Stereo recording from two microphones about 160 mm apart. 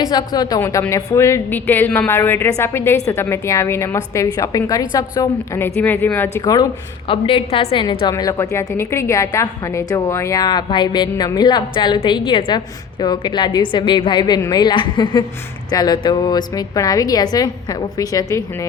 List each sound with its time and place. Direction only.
0.0 s a woman's voice: 25° left (ahead or behind)